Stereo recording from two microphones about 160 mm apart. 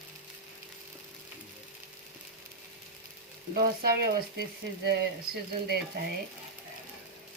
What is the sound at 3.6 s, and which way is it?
Speech, 80° right.